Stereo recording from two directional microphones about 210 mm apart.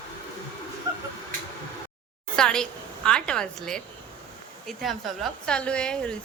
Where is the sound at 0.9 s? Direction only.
20° right (ahead or behind).